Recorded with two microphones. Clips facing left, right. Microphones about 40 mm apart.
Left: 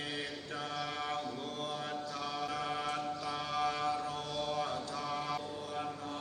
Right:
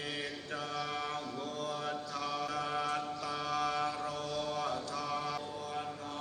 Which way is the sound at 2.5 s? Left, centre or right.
Left.